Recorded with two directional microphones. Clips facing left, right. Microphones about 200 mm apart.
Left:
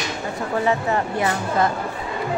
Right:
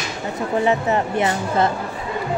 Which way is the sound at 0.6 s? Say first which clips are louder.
Right 2 dB; 20° right (ahead or behind).